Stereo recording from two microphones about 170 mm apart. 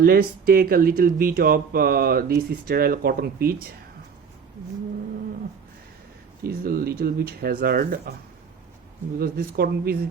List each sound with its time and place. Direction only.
0.0 s speech: 65° right (ahead or behind)
6.4 s speech: 60° right (ahead or behind)
9.1 s speech: 60° right (ahead or behind)